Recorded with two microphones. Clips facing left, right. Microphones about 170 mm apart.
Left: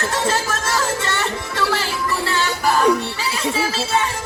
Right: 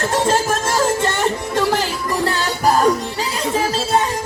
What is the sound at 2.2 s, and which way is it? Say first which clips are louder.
Music: right 3 dB; 45° right (ahead or behind).